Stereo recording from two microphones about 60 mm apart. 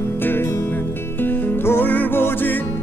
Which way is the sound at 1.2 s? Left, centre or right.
Left.